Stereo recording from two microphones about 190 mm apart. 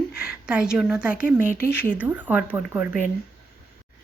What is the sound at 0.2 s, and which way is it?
A woman's voice, 5° right (ahead or behind).